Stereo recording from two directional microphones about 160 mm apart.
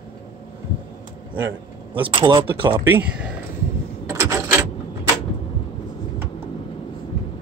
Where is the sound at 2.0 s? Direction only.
30° right (ahead or behind).